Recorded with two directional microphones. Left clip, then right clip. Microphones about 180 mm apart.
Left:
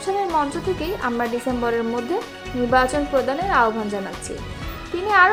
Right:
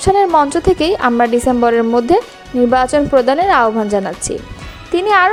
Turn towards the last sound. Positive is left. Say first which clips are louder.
# right 5 dB
turn(degrees=-50)  # may be behind; listen again after turning